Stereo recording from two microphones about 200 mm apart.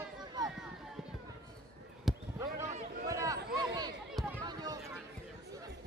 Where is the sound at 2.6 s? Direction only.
35° right (ahead or behind).